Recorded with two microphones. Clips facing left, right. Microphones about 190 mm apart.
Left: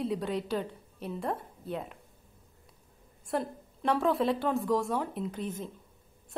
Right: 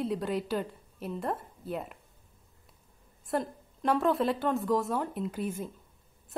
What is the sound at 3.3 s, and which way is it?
A woman's voice, centre (ahead or behind).